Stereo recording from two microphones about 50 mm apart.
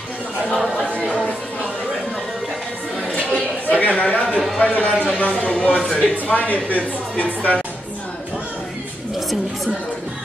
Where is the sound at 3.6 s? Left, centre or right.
Left.